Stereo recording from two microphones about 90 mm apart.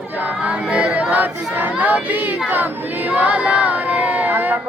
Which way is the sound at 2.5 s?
20° right (ahead or behind).